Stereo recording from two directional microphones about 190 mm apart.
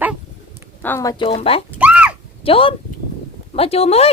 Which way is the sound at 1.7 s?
5° right (ahead or behind).